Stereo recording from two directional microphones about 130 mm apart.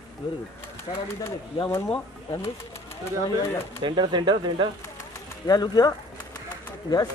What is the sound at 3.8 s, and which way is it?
Speech, 35° right (ahead or behind).